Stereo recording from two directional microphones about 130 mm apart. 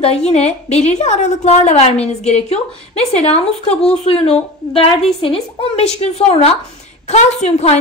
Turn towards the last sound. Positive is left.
turn(degrees=55)  # may be behind; listen again after turning